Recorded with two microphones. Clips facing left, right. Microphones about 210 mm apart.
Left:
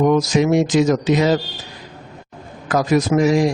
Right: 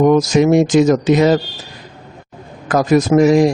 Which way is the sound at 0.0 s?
45° right (ahead or behind).